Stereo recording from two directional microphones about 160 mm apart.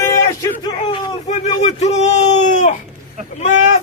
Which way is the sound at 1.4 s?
40° left (ahead or behind).